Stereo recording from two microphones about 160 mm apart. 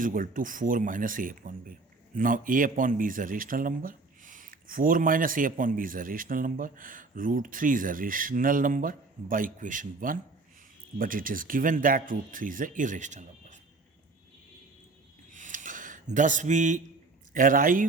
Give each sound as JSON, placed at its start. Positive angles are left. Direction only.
{"t": 0.0, "sound": "a man's voice", "side_deg": -60}
{"t": 15.3, "sound": "a sound", "side_deg": -55}
{"t": 17.3, "sound": "a man's voice", "side_deg": -60}